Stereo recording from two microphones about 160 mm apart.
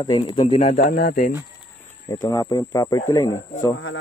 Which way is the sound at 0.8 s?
65° left (ahead or behind).